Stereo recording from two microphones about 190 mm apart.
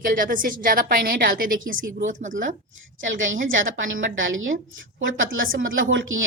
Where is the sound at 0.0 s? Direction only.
45° right (ahead or behind).